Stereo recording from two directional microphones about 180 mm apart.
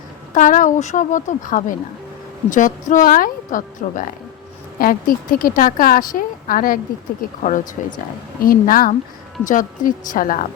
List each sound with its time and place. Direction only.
0.3 s a woman's voice: 45° left (ahead or behind)